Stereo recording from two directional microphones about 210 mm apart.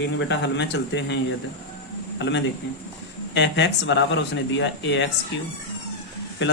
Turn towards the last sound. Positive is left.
turn(degrees=55)  # may be behind; listen again after turning